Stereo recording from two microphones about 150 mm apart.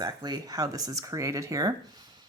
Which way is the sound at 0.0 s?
25° right (ahead or behind).